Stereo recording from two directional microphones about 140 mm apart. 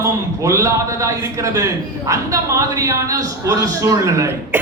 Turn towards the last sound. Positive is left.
turn(degrees=-20)  # may be behind; listen again after turning